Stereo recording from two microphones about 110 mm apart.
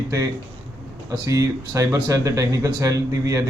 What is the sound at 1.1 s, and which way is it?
Speech, 30° right (ahead or behind).